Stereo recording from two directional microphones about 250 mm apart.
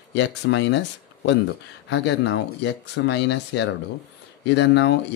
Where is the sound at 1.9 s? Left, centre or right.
Left.